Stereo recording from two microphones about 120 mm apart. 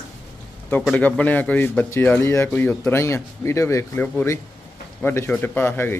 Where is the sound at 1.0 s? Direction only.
15° left (ahead or behind).